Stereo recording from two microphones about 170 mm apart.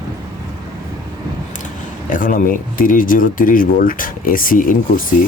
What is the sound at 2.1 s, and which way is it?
Speech, 55° left (ahead or behind).